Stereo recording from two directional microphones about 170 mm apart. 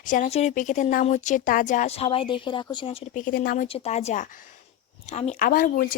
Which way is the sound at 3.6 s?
35° left (ahead or behind).